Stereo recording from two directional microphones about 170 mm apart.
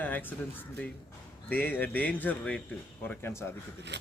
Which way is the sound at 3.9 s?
90° right.